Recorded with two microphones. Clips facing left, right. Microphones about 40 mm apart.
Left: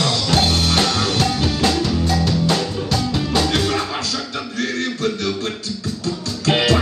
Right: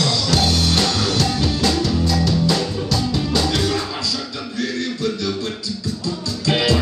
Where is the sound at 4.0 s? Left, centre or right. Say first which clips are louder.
Left 1 dB; left.